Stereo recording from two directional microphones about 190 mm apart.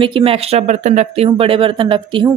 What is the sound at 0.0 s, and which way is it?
Speech, 30° right (ahead or behind).